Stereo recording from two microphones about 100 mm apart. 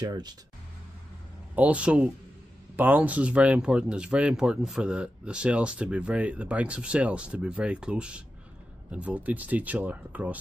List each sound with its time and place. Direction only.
0.0 s speech: 40° right (ahead or behind)
1.5 s speech: 15° right (ahead or behind)